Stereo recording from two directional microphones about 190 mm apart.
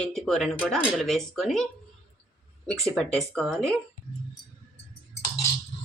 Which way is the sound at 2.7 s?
Centre (ahead or behind).